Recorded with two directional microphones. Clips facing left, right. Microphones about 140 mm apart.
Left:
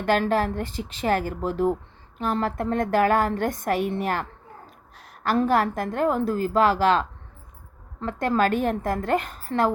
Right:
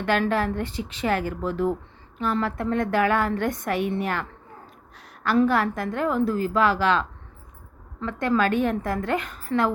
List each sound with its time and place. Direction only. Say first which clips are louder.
0.0 s a woman's voice: left 1 dB; 40° left (ahead or behind)